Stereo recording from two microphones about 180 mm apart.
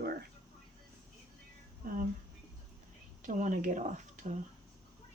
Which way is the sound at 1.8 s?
50° right (ahead or behind).